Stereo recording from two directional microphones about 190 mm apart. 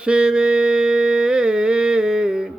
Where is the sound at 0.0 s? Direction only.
5° right (ahead or behind).